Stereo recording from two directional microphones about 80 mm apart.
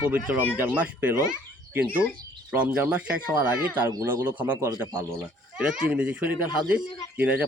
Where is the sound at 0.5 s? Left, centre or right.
Right.